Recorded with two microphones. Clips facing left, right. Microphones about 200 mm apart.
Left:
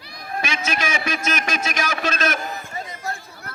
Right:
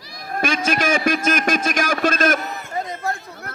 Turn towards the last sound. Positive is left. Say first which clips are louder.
# right 5 dB
turn(degrees=-60)  # may be behind; listen again after turning